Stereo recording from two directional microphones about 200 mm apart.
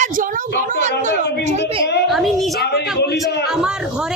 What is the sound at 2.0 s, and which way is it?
Speech, centre (ahead or behind).